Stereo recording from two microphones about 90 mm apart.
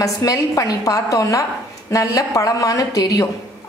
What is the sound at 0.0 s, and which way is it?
A woman's voice, 40° left (ahead or behind).